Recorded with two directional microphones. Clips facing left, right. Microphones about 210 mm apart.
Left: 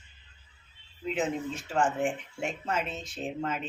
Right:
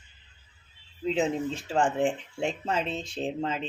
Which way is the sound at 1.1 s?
30° right (ahead or behind).